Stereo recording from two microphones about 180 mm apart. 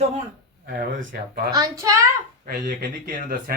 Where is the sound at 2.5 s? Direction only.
55° right (ahead or behind).